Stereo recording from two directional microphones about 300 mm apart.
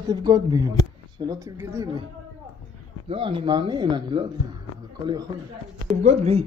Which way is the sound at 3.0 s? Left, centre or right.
Centre.